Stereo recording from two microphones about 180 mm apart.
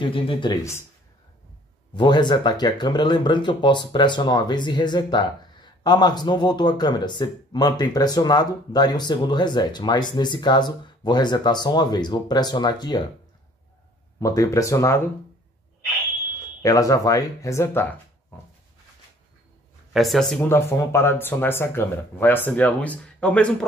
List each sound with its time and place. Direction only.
0.0 s speech: 30° left (ahead or behind)
2.0 s speech: 25° left (ahead or behind)
14.2 s speech: 20° left (ahead or behind)
16.6 s speech: 20° left (ahead or behind)
19.9 s speech: centre (ahead or behind)